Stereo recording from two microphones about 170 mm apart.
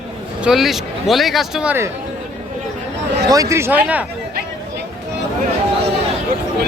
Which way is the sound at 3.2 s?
20° right (ahead or behind).